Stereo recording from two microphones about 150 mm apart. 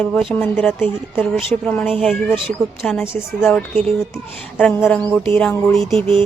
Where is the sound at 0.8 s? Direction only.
15° left (ahead or behind).